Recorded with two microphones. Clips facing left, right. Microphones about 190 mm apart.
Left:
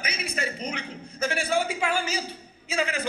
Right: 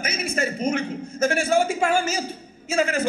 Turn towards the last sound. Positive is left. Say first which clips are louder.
# right 6 dB
turn(degrees=-45)  # may be behind; listen again after turning